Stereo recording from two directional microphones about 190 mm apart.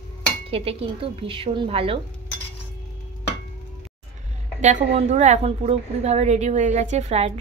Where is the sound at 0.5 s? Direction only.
30° right (ahead or behind).